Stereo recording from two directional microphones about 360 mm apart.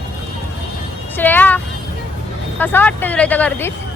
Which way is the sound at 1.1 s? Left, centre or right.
Centre.